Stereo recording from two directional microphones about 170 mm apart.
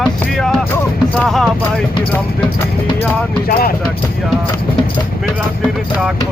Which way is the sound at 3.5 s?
60° left (ahead or behind).